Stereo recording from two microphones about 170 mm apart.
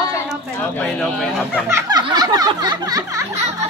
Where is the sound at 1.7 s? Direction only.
25° right (ahead or behind).